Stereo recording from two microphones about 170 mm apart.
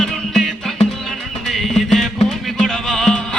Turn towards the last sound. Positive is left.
turn(degrees=0)  # may be behind; listen again after turning